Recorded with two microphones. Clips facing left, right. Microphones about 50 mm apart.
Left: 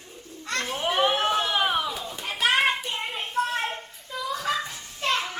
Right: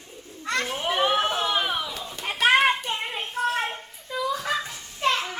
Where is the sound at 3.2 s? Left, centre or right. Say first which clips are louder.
Even; centre.